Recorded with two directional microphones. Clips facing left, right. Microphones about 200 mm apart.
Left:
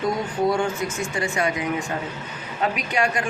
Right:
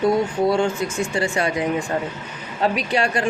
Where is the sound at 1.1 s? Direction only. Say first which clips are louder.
Right 1 dB; 30° right (ahead or behind).